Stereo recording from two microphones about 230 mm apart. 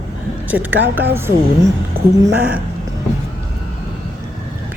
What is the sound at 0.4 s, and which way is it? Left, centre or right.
A woman's voice, centre.